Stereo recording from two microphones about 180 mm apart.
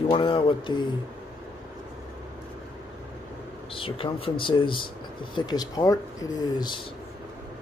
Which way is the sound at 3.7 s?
30° left (ahead or behind).